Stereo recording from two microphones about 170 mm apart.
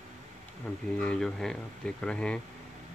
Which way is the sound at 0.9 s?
5° left (ahead or behind).